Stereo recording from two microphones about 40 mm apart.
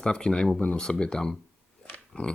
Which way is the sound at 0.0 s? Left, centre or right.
Left.